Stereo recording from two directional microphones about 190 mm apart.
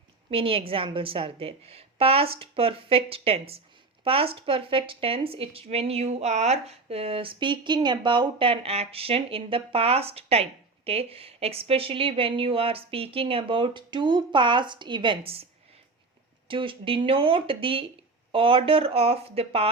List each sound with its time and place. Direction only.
0.3 s speech: 30° right (ahead or behind)
16.5 s speech: 25° right (ahead or behind)